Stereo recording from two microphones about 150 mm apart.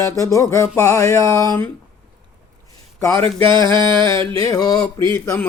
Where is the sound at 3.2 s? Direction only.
30° right (ahead or behind).